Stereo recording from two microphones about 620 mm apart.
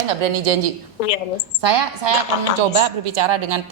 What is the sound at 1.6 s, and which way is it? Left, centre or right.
A woman's voice, right.